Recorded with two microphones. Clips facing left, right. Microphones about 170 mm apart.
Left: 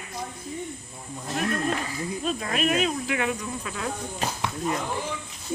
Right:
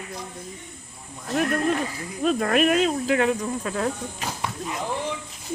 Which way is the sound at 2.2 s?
55° right (ahead or behind).